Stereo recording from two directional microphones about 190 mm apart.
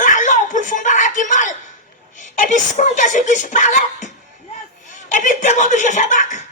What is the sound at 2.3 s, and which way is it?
Speech, 40° left (ahead or behind).